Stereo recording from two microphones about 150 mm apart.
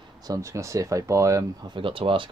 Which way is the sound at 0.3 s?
20° right (ahead or behind).